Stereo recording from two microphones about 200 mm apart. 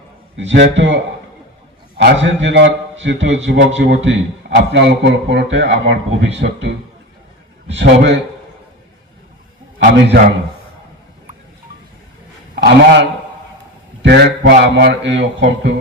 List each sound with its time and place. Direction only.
0.3 s a man's voice: 65° right (ahead or behind)
2.0 s a man's voice: 60° right (ahead or behind)
9.7 s a man's voice: 65° right (ahead or behind)
12.5 s a man's voice: 60° right (ahead or behind)